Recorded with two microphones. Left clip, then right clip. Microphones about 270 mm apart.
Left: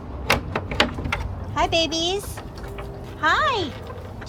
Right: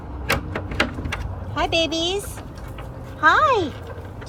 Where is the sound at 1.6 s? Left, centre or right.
Centre.